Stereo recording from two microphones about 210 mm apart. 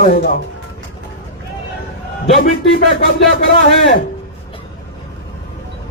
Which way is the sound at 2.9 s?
50° left (ahead or behind).